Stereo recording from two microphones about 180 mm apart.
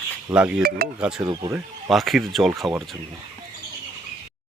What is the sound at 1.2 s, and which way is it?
Speech, 20° right (ahead or behind).